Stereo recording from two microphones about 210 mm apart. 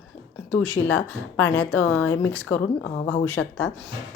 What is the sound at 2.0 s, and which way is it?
Speech, 70° left (ahead or behind).